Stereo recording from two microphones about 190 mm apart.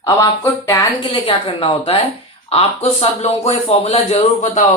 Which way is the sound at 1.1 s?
30° left (ahead or behind).